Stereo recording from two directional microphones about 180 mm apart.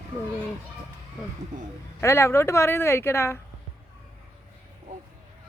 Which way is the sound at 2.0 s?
15° left (ahead or behind).